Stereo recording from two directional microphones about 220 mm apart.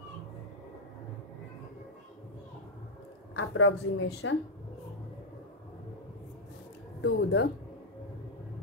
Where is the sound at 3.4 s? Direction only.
60° left (ahead or behind).